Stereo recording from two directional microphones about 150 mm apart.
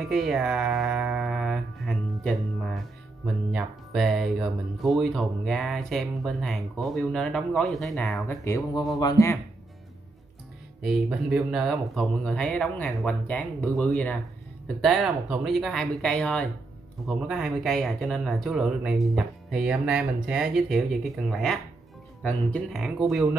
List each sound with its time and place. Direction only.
0.0 s a sound: centre (ahead or behind)
3.5 s speech: centre (ahead or behind)
8.3 s speech: 20° left (ahead or behind)
10.8 s speech: 5° right (ahead or behind)